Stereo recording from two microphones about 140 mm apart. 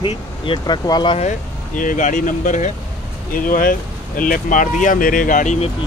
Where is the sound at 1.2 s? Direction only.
65° left (ahead or behind).